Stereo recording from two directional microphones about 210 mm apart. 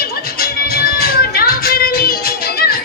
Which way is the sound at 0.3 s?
45° left (ahead or behind).